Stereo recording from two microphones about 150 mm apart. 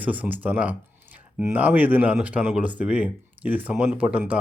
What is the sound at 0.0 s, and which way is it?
Speech, 10° right (ahead or behind).